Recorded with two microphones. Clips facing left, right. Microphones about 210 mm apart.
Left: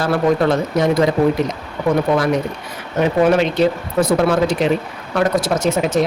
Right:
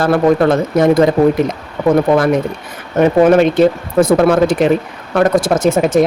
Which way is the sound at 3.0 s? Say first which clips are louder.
Right 5 dB; 50° right (ahead or behind).